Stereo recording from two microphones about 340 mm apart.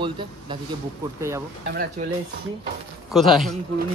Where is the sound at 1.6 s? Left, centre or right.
Right.